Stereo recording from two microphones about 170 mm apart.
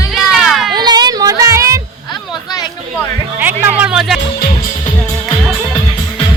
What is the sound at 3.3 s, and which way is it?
Music, 10° right (ahead or behind).